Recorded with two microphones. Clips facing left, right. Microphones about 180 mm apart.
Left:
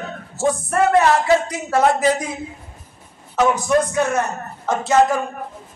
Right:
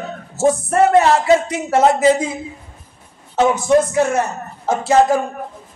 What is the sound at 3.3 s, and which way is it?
A man's voice, 25° right (ahead or behind).